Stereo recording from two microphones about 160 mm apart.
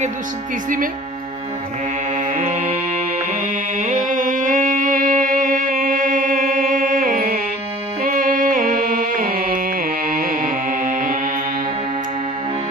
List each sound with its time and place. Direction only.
2.1 s music: 55° right (ahead or behind)
3.8 s music: 55° right (ahead or behind)